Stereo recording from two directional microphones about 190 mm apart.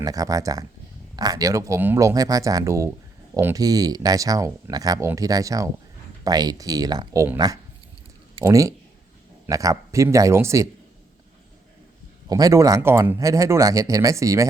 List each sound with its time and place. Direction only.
0.0 s speech: 20° right (ahead or behind)
12.3 s speech: 20° right (ahead or behind)